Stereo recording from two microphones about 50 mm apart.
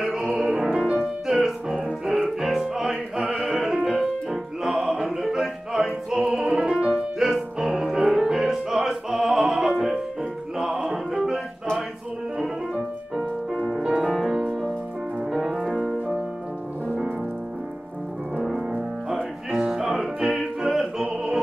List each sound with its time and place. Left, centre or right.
0.0 s music: centre
13.8 s music: centre
14.1 s music: centre
15.6 s music: centre
18.4 s music: centre